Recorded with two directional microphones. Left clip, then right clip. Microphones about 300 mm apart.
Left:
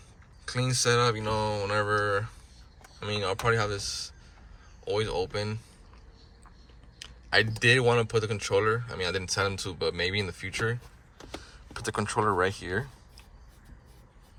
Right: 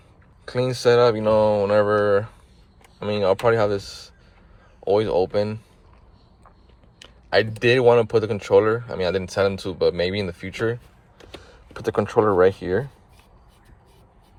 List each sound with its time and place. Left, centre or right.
0.4 s speech: centre
7.0 s a sound: centre
7.6 s speech: centre